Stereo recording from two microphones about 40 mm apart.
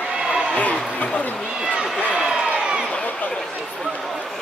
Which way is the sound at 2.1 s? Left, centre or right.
Centre.